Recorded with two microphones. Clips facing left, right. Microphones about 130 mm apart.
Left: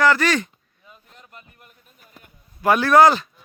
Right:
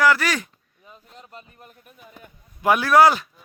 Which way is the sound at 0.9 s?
30° right (ahead or behind).